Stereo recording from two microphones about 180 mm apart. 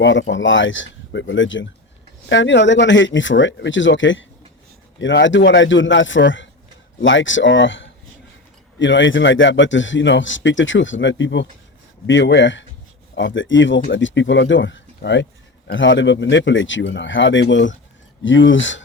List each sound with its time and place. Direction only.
0.0 s speech: 90° left